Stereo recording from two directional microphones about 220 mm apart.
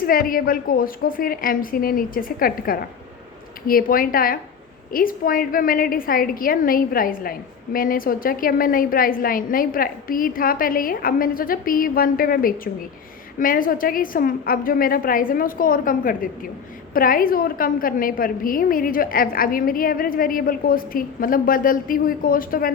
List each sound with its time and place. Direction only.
0.0 s a woman's voice: 40° left (ahead or behind)